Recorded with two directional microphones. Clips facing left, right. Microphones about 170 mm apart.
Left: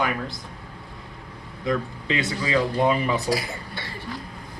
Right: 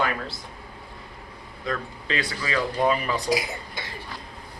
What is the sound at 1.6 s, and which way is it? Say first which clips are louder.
Speech: left 4 dB; 20° left (ahead or behind).